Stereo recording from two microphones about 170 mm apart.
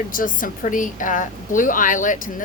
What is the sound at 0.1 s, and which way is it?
A woman's voice, 55° left (ahead or behind).